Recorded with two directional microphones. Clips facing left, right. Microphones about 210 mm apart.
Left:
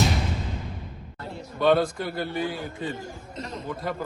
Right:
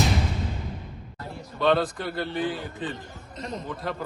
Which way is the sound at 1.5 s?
Centre (ahead or behind).